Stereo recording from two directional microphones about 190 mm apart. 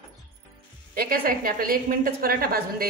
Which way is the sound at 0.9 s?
50° right (ahead or behind).